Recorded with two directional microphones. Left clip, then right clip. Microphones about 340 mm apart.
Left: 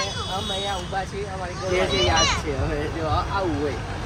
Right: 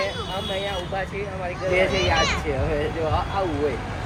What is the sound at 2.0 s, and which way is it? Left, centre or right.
Speech, centre.